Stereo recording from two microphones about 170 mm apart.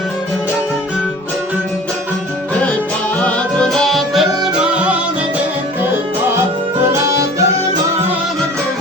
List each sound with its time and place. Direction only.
3.2 s music: 5° left (ahead or behind)
7.1 s music: 15° right (ahead or behind)